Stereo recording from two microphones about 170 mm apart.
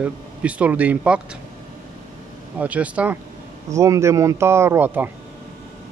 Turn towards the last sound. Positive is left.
turn(degrees=-10)  # may be behind; listen again after turning